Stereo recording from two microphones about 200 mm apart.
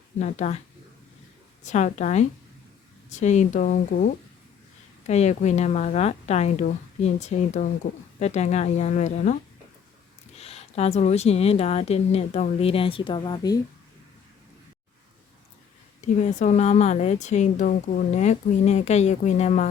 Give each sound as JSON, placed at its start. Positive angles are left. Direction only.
{"t": 0.2, "sound": "speech", "side_deg": 35}
{"t": 1.6, "sound": "speech", "side_deg": 35}
{"t": 16.0, "sound": "speech", "side_deg": 35}